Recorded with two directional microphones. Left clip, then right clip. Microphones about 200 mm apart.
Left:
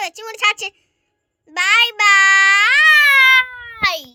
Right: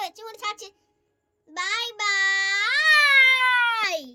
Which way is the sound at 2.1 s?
25° left (ahead or behind).